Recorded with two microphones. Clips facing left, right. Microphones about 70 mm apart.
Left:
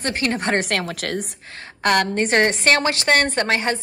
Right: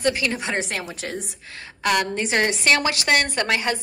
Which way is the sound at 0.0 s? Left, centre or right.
Left.